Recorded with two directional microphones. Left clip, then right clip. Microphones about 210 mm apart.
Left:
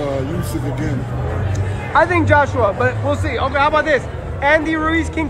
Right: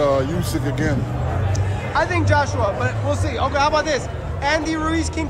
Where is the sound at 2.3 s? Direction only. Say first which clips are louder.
Left 5 dB; 10° right (ahead or behind).